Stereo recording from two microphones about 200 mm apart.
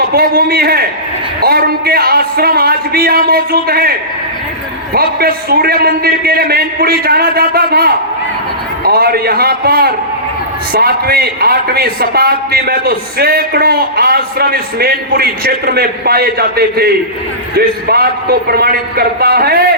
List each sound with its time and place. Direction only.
0.1 s a man's voice: 50° right (ahead or behind)
4.9 s a man's voice: 50° right (ahead or behind)